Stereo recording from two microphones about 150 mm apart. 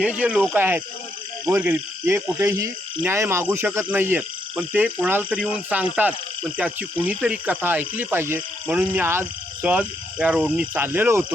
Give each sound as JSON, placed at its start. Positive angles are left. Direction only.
{"t": 0.0, "sound": "speech", "side_deg": -5}